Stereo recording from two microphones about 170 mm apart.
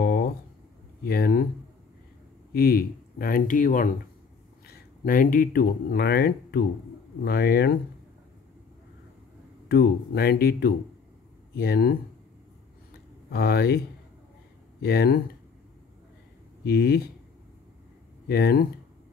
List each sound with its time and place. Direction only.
0.0 s a sound: 65° left (ahead or behind)
1.0 s speech: 60° left (ahead or behind)
2.5 s speech: 60° left (ahead or behind)
9.7 s speech: 65° left (ahead or behind)
13.3 s speech: 65° left (ahead or behind)
14.8 s speech: 70° left (ahead or behind)
16.6 s speech: 65° left (ahead or behind)
18.3 s speech: 65° left (ahead or behind)